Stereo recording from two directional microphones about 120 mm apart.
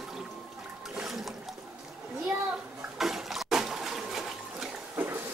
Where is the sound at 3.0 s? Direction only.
Centre (ahead or behind).